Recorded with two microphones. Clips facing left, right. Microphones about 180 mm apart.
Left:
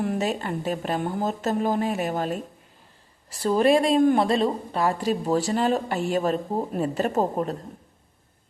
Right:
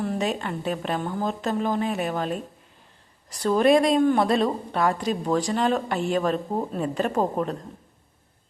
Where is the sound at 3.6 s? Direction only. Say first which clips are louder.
Even; 30° left (ahead or behind).